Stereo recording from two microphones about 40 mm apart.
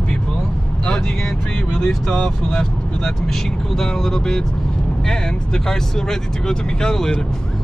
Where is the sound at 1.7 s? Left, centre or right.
Centre.